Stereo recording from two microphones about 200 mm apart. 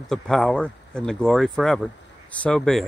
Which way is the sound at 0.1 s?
Centre (ahead or behind).